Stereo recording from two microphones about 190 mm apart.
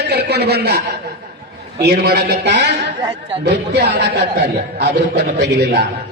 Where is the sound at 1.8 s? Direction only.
60° right (ahead or behind).